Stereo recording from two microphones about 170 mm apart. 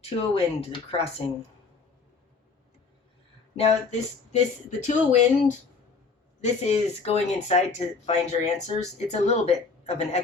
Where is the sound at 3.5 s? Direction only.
40° left (ahead or behind).